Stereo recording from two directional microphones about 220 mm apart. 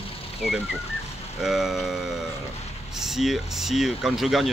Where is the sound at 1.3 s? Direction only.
Centre (ahead or behind).